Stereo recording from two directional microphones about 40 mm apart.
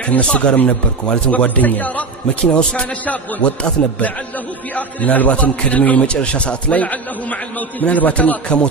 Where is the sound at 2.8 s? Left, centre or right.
Left.